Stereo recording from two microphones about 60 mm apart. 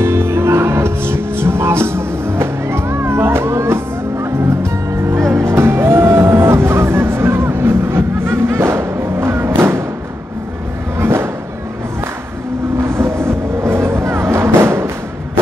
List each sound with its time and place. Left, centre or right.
0.0 s music: right
11.0 s music: right
12.8 s music: right